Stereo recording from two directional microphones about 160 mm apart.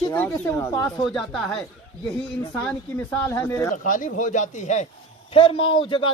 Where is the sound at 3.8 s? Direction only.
55° left (ahead or behind).